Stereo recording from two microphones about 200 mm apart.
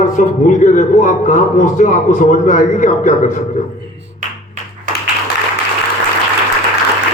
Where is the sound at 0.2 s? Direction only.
40° left (ahead or behind).